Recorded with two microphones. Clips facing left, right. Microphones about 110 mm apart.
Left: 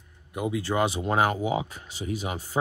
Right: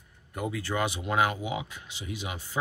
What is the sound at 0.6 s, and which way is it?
Speech, 30° left (ahead or behind).